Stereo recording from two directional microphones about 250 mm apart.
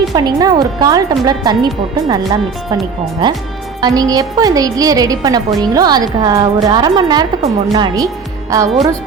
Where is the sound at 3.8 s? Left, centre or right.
Centre.